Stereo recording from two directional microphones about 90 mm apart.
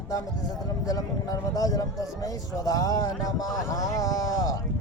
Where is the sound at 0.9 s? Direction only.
40° left (ahead or behind).